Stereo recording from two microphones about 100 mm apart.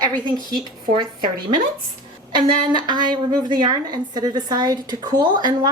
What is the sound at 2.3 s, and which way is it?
A woman's voice, 50° right (ahead or behind).